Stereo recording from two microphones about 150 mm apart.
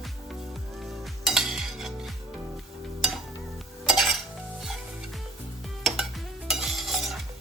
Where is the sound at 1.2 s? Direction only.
Centre (ahead or behind).